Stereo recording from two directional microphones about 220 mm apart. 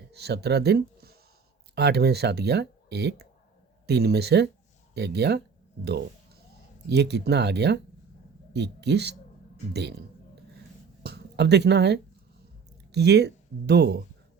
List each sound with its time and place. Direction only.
0.1 s speech: 50° right (ahead or behind)
6.8 s speech: 50° right (ahead or behind)
11.0 s a sound: 50° right (ahead or behind)
12.9 s speech: 50° right (ahead or behind)